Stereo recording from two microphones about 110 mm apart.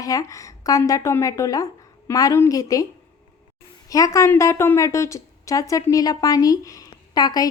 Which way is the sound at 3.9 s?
30° left (ahead or behind).